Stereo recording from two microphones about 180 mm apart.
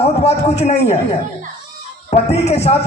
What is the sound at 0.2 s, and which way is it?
Speech, 35° left (ahead or behind).